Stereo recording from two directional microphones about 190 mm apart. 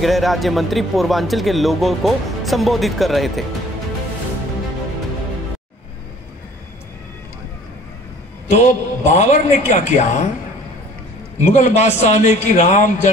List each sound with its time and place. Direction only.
0.0 s speech: centre (ahead or behind)
8.6 s a man's voice: 40° left (ahead or behind)
11.3 s a man's voice: 40° left (ahead or behind)